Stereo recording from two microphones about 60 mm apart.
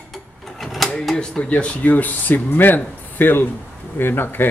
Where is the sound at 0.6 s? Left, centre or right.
Centre.